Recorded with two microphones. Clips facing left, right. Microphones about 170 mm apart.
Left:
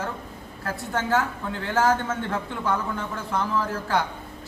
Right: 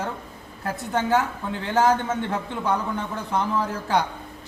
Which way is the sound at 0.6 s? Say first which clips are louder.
Right 3 dB; 15° right (ahead or behind).